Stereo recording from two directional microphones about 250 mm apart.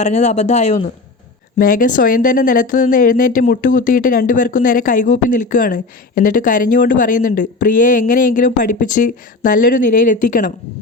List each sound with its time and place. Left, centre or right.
0.0 s speech: left